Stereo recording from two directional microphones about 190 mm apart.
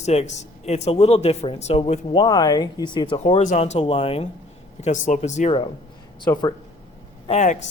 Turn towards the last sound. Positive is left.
turn(degrees=40)  # may be behind; listen again after turning